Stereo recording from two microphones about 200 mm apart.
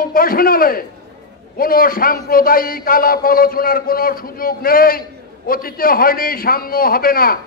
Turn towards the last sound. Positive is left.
turn(degrees=45)  # may be behind; listen again after turning